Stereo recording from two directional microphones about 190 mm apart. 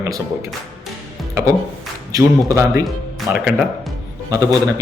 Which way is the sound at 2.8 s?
5° right (ahead or behind).